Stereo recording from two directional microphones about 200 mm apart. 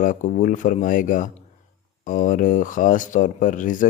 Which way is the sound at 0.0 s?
40° left (ahead or behind).